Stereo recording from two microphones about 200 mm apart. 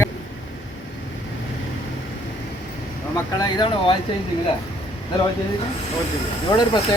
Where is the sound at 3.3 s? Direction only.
20° left (ahead or behind).